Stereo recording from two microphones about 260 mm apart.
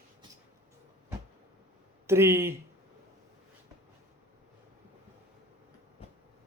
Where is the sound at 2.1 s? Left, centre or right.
Centre.